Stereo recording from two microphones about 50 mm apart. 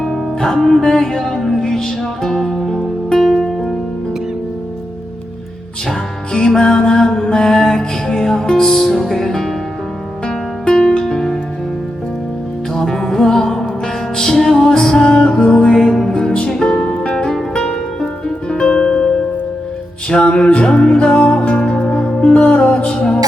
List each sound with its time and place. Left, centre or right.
0.0 s music: centre
5.9 s music: centre
12.7 s music: centre; by 23.0 s left